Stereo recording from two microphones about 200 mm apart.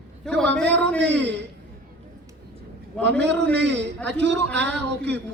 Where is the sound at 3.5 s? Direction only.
60° right (ahead or behind).